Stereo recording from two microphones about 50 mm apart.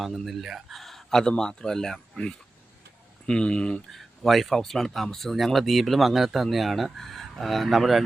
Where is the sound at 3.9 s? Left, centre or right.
Centre.